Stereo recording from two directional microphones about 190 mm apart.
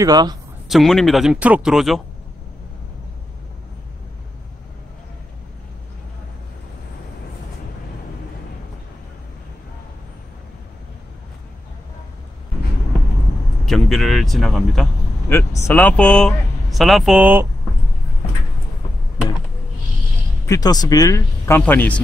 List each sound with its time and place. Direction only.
0.0 s speech: 20° right (ahead or behind)
0.7 s speech: centre (ahead or behind)
13.7 s a sound: centre (ahead or behind)
15.2 s speech: 15° left (ahead or behind); by 17.5 s 10° right (ahead or behind)
20.4 s speech: 20° left (ahead or behind)